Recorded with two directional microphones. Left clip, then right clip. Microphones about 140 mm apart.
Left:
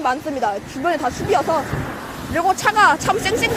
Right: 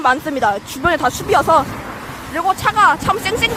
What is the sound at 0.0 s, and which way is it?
Speech, 25° right (ahead or behind).